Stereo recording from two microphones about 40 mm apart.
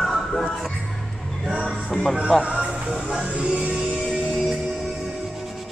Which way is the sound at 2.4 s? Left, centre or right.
Right.